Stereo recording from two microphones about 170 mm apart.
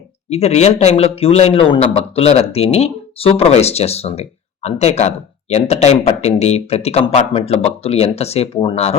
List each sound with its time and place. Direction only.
0.3 s a man's voice: 40° left (ahead or behind)